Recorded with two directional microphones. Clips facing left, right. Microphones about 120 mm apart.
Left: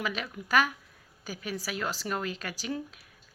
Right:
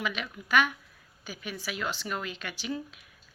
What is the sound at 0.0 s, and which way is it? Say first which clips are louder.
Speech: even; 40° left (ahead or behind).